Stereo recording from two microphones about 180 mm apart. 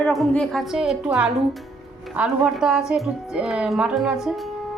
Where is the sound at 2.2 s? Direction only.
5° right (ahead or behind).